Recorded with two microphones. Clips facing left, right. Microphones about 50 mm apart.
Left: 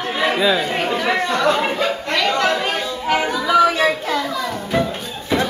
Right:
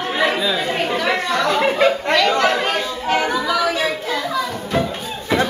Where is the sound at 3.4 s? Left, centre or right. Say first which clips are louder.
Left 5 dB; centre.